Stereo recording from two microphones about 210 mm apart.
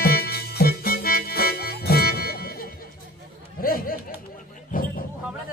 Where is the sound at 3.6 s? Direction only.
45° left (ahead or behind).